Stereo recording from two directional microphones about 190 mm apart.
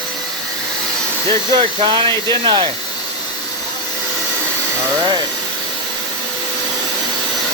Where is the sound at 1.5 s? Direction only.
25° right (ahead or behind).